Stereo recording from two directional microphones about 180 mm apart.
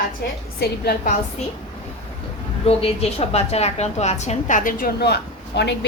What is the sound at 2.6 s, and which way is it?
A woman's voice, 35° left (ahead or behind).